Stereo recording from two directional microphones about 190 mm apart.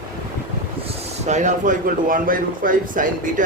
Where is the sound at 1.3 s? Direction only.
40° right (ahead or behind).